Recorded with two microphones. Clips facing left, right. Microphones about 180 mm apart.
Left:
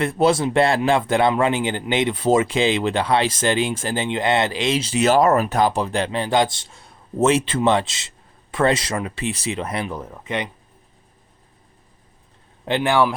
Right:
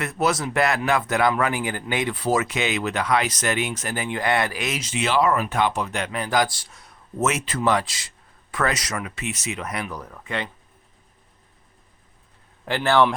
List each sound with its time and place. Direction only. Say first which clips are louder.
0.0 s a man's voice: left 6 dB; 30° left (ahead or behind)
12.6 s speech: left 1 dB; 15° left (ahead or behind)